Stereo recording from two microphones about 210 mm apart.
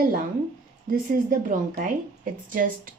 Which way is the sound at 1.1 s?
40° right (ahead or behind).